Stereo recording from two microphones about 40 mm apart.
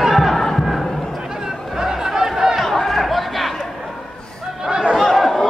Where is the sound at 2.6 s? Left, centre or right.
Centre.